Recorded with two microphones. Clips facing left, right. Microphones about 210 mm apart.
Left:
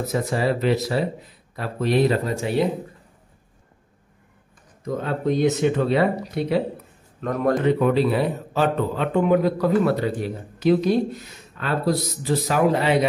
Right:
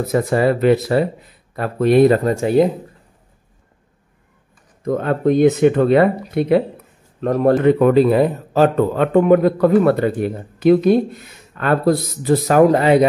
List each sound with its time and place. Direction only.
0.1 s a man's voice: 55° right (ahead or behind)
4.8 s speech: 55° right (ahead or behind)
7.2 s a man's voice: 30° right (ahead or behind)
7.6 s a man's voice: 50° right (ahead or behind)